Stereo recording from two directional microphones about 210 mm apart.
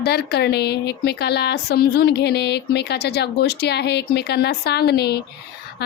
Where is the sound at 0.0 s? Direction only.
50° left (ahead or behind).